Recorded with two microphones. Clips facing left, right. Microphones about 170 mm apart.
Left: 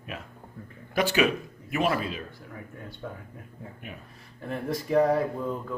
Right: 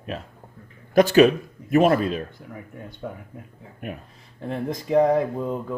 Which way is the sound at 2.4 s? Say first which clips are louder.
Right 3 dB; 20° right (ahead or behind).